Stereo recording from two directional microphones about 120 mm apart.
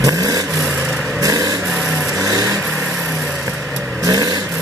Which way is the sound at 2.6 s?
Centre (ahead or behind).